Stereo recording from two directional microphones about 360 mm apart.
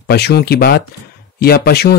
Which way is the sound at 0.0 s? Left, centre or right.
Left.